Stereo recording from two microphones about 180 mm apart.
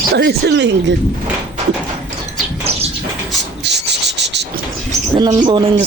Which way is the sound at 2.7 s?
35° right (ahead or behind).